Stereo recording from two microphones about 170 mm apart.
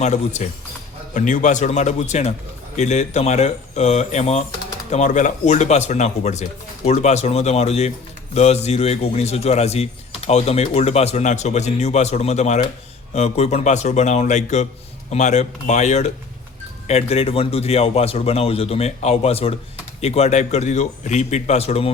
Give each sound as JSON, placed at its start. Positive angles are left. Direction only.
{"t": 0.0, "sound": "speech", "side_deg": 40}